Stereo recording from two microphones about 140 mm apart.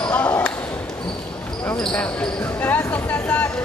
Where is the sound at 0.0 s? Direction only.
10° left (ahead or behind).